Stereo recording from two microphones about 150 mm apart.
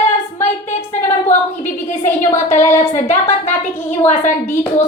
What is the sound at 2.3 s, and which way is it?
A woman's voice, 15° left (ahead or behind).